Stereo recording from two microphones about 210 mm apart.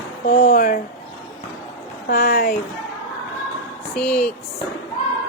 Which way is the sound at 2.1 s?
45° left (ahead or behind).